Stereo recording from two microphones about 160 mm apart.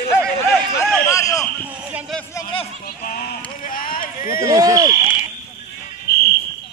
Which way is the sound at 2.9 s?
75° left (ahead or behind).